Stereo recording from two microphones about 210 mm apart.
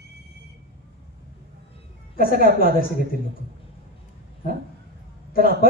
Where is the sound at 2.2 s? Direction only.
45° left (ahead or behind).